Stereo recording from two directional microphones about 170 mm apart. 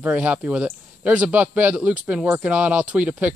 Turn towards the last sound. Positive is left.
turn(degrees=-10)  # may be behind; listen again after turning